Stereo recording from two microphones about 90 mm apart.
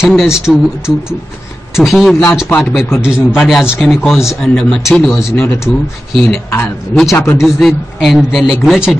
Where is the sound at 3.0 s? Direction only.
10° right (ahead or behind).